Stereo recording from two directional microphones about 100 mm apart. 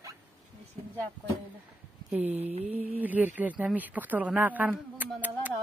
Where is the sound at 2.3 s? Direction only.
90° right.